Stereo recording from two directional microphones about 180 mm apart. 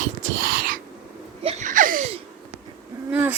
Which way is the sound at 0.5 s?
55° right (ahead or behind).